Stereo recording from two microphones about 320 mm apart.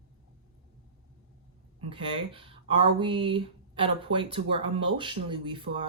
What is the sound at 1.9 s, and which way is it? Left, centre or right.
Speech, centre.